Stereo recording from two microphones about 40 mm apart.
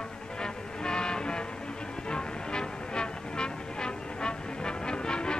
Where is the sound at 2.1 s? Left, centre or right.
Left.